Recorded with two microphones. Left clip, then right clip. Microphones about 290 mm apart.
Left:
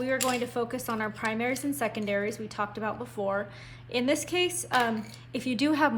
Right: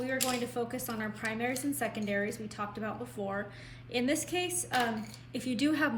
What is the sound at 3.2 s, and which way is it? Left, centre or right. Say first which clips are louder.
Speech: left 8 dB; left.